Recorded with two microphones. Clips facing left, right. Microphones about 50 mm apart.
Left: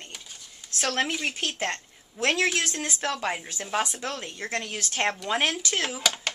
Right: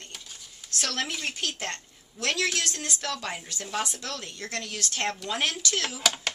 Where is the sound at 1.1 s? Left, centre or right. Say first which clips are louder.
Left 4 dB; centre.